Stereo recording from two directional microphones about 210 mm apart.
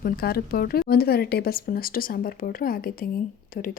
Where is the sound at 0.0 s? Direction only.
45° left (ahead or behind).